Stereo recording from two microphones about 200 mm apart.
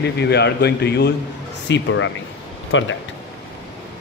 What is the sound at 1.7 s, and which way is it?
Speech, 70° left (ahead or behind).